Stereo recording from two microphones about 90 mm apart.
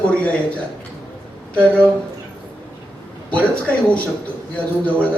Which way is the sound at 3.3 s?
15° left (ahead or behind).